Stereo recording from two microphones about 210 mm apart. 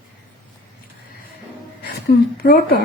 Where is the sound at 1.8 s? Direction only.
50° left (ahead or behind).